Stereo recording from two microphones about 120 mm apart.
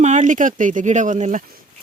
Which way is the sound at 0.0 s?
85° right.